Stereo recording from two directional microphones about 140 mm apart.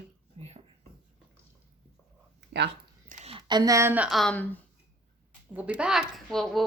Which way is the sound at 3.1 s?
65° right (ahead or behind).